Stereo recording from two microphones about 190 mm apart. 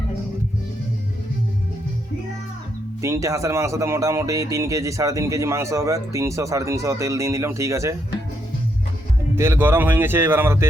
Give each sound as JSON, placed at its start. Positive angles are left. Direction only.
{"t": 3.0, "sound": "speech", "side_deg": -15}
{"t": 9.3, "sound": "speech", "side_deg": -15}